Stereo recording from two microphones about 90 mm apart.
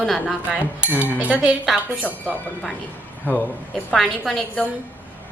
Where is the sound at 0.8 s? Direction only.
15° right (ahead or behind).